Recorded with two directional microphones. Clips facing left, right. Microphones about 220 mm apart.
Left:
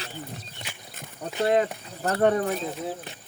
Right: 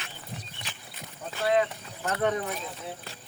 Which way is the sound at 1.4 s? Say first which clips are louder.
Left 2 dB; 40° left (ahead or behind).